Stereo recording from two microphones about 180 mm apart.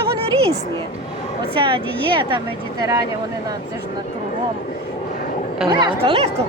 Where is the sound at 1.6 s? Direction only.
30° right (ahead or behind).